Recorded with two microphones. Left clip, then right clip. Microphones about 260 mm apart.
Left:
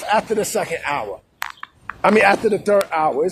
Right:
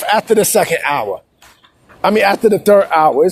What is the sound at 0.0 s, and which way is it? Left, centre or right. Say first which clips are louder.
Speech: right 6 dB; right.